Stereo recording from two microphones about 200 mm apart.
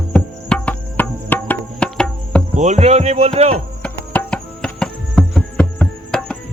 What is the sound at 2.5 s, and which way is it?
Speech, 35° right (ahead or behind).